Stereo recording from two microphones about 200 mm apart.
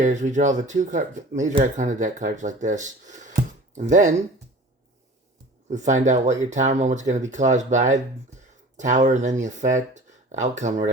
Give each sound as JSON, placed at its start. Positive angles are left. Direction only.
{"t": 0.0, "sound": "speech", "side_deg": -35}
{"t": 5.6, "sound": "speech", "side_deg": -35}